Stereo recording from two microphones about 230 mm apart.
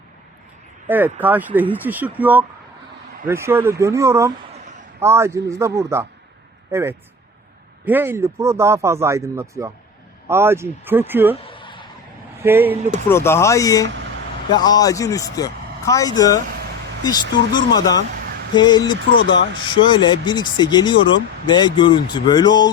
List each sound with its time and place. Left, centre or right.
0.9 s speech: centre
11.4 s a sound: left
12.4 s speech: centre
12.9 s speech: centre